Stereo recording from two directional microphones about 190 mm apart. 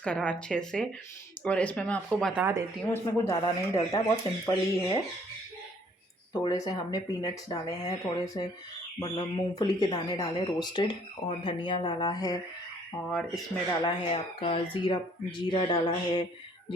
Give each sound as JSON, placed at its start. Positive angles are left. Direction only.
{"t": 0.0, "sound": "speech", "side_deg": 5}
{"t": 2.1, "sound": "speech", "side_deg": -5}
{"t": 2.9, "sound": "speech", "side_deg": 15}
{"t": 6.4, "sound": "speech", "side_deg": 20}
{"t": 13.1, "sound": "speech", "side_deg": 0}
{"t": 13.8, "sound": "speech", "side_deg": 30}